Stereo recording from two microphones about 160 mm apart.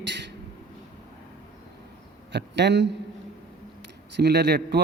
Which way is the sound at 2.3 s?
90° right.